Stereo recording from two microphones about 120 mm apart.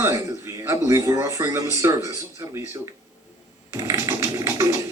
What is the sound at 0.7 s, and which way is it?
Speech, 25° right (ahead or behind).